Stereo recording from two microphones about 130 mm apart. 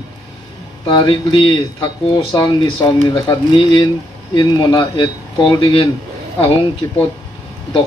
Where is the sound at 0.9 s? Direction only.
40° left (ahead or behind).